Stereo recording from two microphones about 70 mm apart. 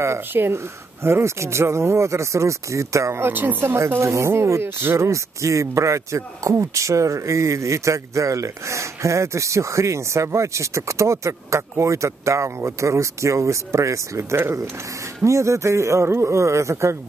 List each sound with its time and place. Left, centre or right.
0.0 s speech: right